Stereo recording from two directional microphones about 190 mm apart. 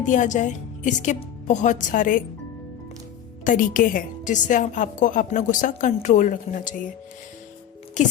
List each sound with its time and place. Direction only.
0.0 s a woman's voice: 40° left (ahead or behind)
3.4 s a woman's voice: 45° left (ahead or behind)
8.0 s speech: 40° left (ahead or behind)